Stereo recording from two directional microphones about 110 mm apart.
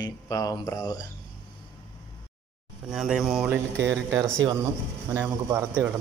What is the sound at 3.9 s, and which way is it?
Speech, 30° right (ahead or behind).